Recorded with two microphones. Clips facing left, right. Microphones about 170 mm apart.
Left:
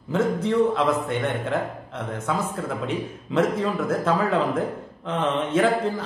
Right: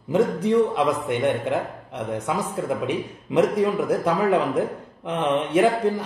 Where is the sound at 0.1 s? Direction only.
15° right (ahead or behind).